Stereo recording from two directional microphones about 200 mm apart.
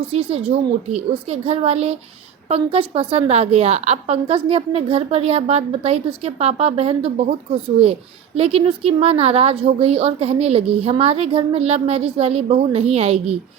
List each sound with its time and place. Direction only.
0.0 s a woman's voice: 30° right (ahead or behind)